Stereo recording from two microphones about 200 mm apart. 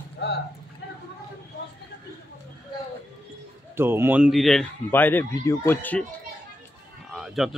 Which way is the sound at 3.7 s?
10° right (ahead or behind).